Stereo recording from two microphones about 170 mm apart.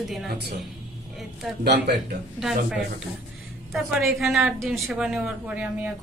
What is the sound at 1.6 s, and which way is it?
Speech, 75° right (ahead or behind).